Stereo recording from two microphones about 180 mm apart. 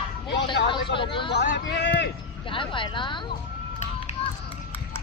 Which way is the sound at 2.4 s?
30° left (ahead or behind).